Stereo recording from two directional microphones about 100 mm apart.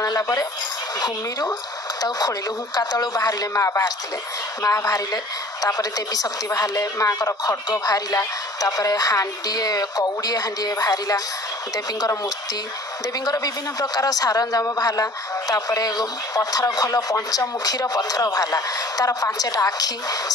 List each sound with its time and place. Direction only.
0.0 s a sound: 40° left (ahead or behind)
2.0 s a man's voice: 40° left (ahead or behind)
13.2 s a man's voice: 40° left (ahead or behind)